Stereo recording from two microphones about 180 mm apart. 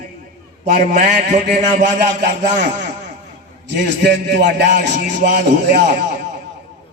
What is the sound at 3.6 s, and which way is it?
A man's voice, 70° right (ahead or behind).